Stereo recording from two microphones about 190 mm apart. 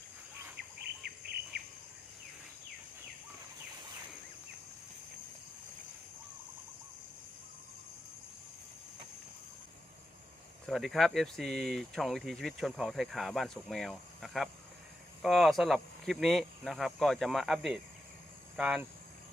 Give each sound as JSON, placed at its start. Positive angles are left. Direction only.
{"t": 0.9, "sound": "bird", "side_deg": -55}
{"t": 10.7, "sound": "speech", "side_deg": 0}